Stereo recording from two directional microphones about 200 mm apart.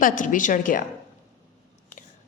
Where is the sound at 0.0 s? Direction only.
40° left (ahead or behind).